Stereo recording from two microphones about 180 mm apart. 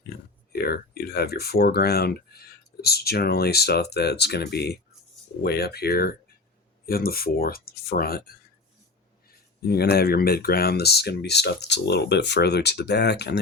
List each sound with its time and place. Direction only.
0.5 s speech: 60° left (ahead or behind)
9.6 s speech: 60° left (ahead or behind)